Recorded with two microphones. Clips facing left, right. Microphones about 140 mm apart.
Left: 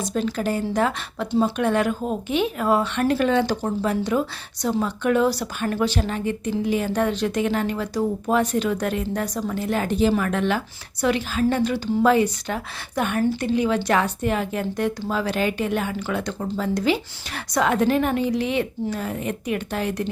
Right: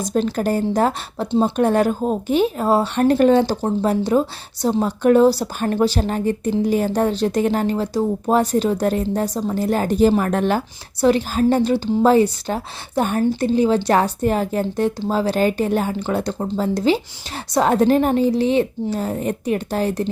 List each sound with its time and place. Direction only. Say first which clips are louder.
0.0 s a woman's voice: right 4 dB; 45° right (ahead or behind)